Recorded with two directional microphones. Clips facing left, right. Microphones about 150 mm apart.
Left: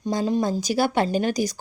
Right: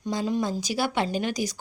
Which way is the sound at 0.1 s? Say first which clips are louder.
Left 4 dB; 40° left (ahead or behind).